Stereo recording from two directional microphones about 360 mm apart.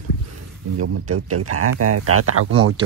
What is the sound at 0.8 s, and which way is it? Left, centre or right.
Speech, right.